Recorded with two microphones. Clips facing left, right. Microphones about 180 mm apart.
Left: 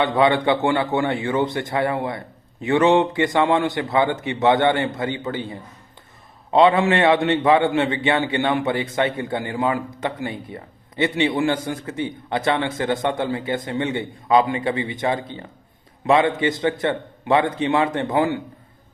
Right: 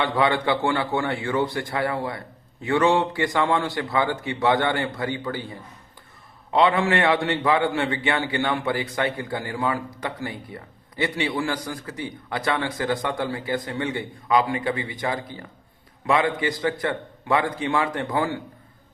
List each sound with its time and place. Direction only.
0.0 s a man's voice: 20° left (ahead or behind)